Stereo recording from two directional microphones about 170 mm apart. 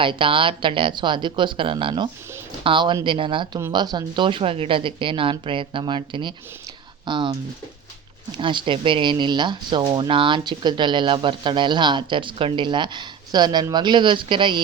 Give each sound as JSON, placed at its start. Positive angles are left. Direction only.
{"t": 0.0, "sound": "speech", "side_deg": -30}